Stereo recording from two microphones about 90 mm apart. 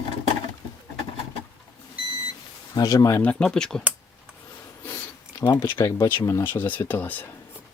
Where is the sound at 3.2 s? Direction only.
10° left (ahead or behind).